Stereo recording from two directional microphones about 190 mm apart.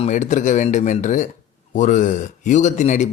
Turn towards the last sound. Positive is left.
turn(degrees=40)  # may be behind; listen again after turning